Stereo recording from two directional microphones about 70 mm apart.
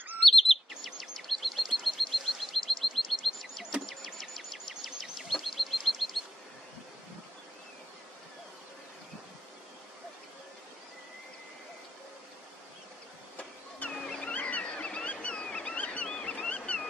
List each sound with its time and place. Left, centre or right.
0.2 s chirp: centre
3.8 s bird vocalization: centre
13.4 s vehicle: left
13.9 s a sound: centre